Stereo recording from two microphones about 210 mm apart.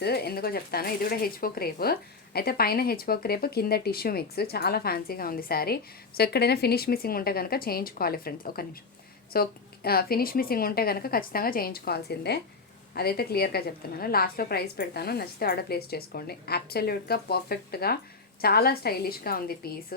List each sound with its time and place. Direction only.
0.0 s speech: 50° left (ahead or behind)